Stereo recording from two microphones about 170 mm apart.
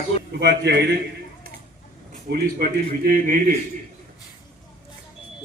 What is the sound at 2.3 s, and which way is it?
A man's voice, 60° right (ahead or behind).